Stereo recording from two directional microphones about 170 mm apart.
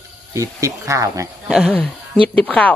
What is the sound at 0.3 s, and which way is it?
Speech, 20° right (ahead or behind).